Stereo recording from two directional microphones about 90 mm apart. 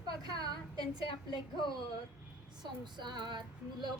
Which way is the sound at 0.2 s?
45° right (ahead or behind).